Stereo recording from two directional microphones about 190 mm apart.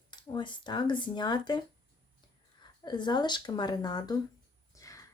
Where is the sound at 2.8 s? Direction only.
25° left (ahead or behind).